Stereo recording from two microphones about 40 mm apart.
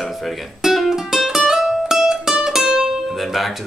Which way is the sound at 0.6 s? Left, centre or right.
Centre.